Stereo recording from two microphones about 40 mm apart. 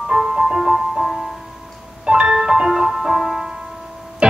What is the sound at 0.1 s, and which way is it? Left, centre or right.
Music, centre.